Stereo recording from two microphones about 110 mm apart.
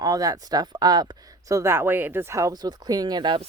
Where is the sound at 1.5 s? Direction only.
25° right (ahead or behind); by 3.4 s 45° right (ahead or behind).